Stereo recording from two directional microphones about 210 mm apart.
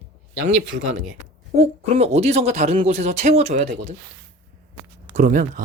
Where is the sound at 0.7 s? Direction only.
40° right (ahead or behind).